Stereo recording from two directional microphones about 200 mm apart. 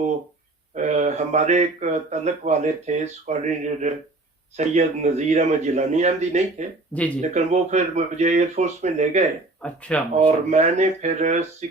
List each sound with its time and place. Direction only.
0.8 s speech: 35° right (ahead or behind)
9.6 s speech: 5° left (ahead or behind)
10.2 s speech: 35° right (ahead or behind)